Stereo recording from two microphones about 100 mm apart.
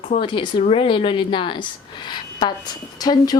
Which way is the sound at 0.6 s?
70° left (ahead or behind).